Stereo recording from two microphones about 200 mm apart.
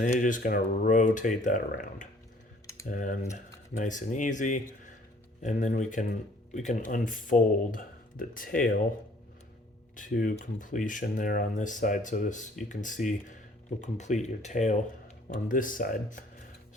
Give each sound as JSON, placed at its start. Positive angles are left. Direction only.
{"t": 0.0, "sound": "speech", "side_deg": 40}
{"t": 9.9, "sound": "speech", "side_deg": 40}